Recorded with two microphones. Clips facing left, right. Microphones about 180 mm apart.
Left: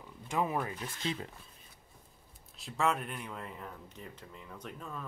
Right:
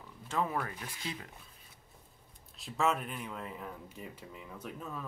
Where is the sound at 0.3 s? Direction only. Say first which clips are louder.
Left 1 dB; 15° left (ahead or behind).